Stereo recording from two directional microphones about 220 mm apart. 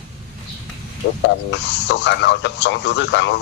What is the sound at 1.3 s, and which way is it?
Speech, 55° left (ahead or behind).